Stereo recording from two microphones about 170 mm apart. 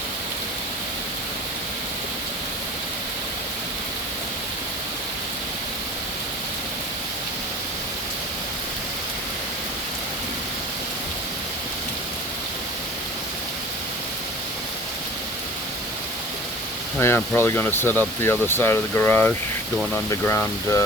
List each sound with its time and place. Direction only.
17.0 s speech: 15° left (ahead or behind)